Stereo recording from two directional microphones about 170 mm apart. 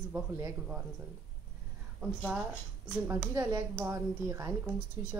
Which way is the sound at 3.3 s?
20° right (ahead or behind).